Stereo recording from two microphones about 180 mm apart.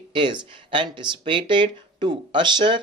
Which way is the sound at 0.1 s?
25° right (ahead or behind).